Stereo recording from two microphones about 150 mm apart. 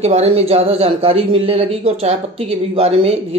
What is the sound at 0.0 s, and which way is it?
A man's voice, 45° right (ahead or behind).